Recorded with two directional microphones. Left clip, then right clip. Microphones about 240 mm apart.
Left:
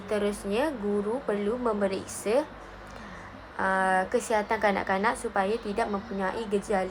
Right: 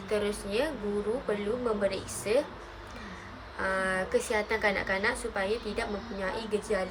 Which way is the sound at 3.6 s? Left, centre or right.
Centre.